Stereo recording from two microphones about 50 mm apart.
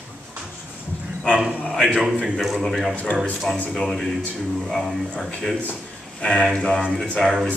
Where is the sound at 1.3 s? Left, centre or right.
Centre.